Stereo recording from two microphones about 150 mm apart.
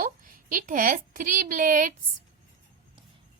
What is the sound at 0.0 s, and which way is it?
A woman's voice, 65° right (ahead or behind).